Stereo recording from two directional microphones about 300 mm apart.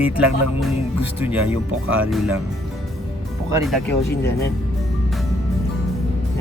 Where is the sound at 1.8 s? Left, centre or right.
Right.